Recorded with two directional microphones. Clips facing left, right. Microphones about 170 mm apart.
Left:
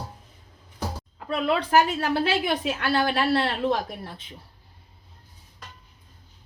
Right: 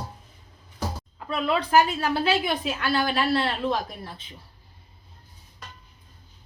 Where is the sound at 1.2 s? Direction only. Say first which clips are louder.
Left 1 dB; 65° left (ahead or behind).